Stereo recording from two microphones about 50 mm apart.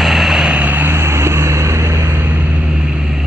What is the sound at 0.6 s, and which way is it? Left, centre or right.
Vehicle, right.